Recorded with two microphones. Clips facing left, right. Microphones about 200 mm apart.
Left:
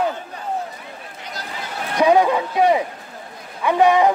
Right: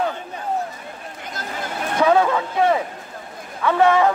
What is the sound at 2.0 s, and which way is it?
A man's voice, 15° left (ahead or behind).